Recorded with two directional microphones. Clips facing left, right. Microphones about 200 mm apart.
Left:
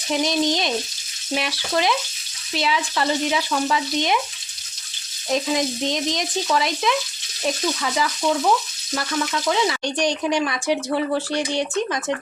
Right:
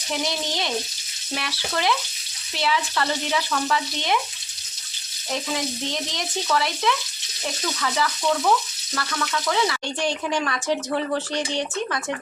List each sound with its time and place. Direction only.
0.3 s frying: 15° left (ahead or behind)
5.3 s frying: 15° left (ahead or behind)
9.5 s frying: 15° left (ahead or behind)